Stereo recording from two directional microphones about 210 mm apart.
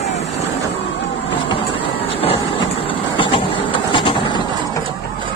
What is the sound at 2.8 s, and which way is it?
Vehicle, 25° left (ahead or behind).